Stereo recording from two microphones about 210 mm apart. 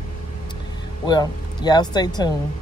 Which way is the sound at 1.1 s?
20° left (ahead or behind).